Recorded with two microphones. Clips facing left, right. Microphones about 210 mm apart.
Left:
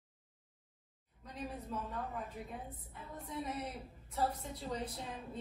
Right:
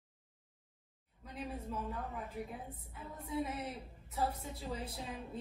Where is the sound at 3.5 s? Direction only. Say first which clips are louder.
Even; centre (ahead or behind).